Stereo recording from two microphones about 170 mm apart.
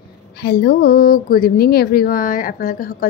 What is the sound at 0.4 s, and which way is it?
A woman's voice, 65° left (ahead or behind).